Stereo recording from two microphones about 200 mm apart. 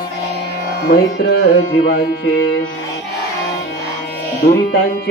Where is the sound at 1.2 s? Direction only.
50° left (ahead or behind).